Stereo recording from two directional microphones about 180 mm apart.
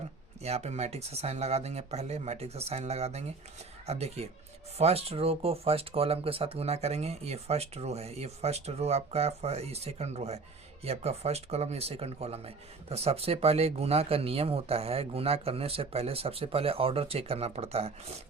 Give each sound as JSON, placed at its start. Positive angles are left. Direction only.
{"t": 0.4, "sound": "speech", "side_deg": -35}